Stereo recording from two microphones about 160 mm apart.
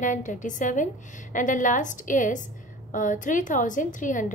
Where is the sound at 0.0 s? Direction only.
50° left (ahead or behind).